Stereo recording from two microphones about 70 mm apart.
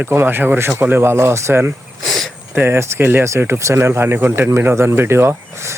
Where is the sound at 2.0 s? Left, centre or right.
Centre.